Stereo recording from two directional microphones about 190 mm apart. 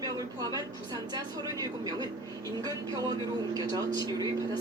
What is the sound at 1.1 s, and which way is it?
Speech, 20° right (ahead or behind).